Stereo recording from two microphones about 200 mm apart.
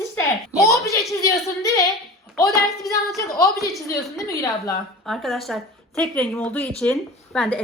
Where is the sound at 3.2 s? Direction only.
15° left (ahead or behind).